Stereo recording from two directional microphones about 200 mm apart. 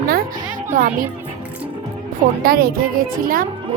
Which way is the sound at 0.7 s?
45° right (ahead or behind).